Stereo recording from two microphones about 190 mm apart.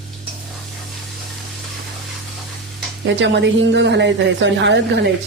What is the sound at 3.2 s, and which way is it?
A woman's voice, 70° right (ahead or behind).